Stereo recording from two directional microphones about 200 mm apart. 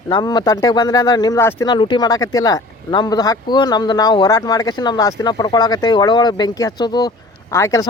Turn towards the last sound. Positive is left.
turn(degrees=15)  # may be behind; listen again after turning